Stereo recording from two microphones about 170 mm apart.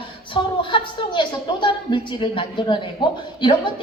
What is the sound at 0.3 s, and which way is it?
A woman's voice, 30° left (ahead or behind).